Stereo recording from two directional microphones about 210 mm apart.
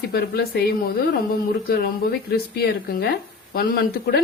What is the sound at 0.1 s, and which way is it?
Speech, 50° left (ahead or behind).